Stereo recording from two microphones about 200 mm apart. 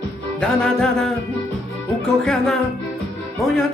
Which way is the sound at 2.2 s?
Centre (ahead or behind).